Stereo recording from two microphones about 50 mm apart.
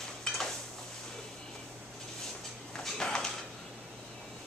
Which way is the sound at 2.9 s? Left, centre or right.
Centre.